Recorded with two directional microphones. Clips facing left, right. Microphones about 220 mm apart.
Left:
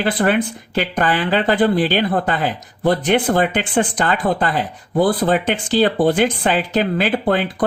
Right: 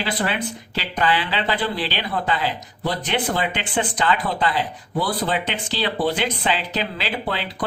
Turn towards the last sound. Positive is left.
turn(degrees=50)  # may be behind; listen again after turning